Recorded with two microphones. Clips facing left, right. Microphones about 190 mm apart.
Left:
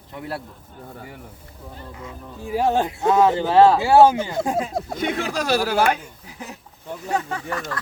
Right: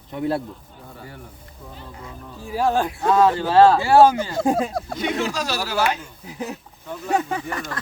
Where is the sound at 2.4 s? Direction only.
20° left (ahead or behind).